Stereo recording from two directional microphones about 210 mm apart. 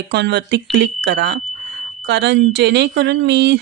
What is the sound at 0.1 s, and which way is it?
Speech, 55° right (ahead or behind).